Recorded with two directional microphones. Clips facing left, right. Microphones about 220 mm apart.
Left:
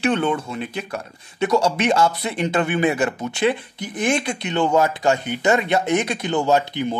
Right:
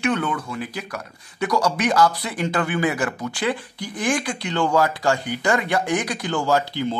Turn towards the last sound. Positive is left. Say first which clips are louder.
# left 2 dB
turn(degrees=20)  # may be behind; listen again after turning